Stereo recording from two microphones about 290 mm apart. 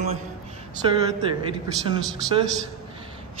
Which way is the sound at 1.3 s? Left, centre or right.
Centre.